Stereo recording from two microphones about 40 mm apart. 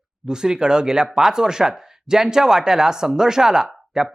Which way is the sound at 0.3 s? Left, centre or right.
Centre.